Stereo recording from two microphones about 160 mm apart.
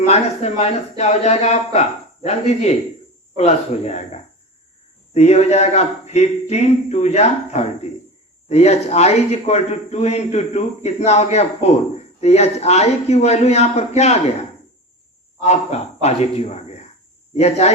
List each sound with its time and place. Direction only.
0.1 s a man's voice: 45° left (ahead or behind)
15.4 s a man's voice: 40° left (ahead or behind)